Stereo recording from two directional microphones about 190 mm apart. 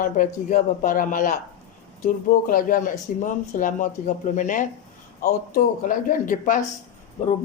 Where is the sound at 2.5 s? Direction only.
45° left (ahead or behind).